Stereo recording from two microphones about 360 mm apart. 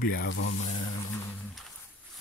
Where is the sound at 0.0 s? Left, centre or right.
Left.